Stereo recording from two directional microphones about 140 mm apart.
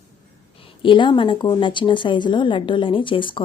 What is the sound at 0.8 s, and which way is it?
A woman's voice, 35° left (ahead or behind).